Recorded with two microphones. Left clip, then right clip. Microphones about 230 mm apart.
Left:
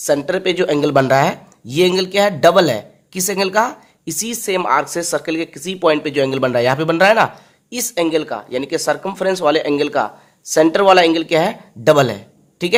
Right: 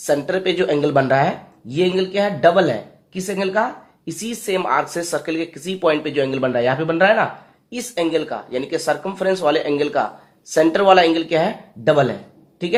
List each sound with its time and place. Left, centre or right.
0.0 s speech: left